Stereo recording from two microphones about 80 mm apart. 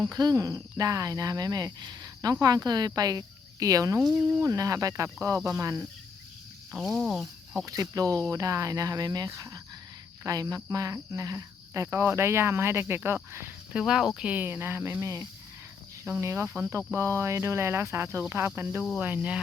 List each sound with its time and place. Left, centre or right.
0.0 s speech: right
6.7 s speech: centre
7.6 s speech: right
13.7 s speech: centre
14.4 s speech: right
15.0 s speech: right
16.2 s speech: right